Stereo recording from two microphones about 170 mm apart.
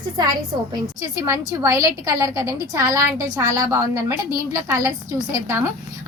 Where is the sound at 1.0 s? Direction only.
20° right (ahead or behind).